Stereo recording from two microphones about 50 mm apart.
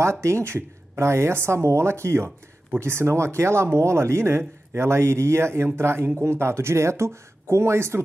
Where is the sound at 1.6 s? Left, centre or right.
Right.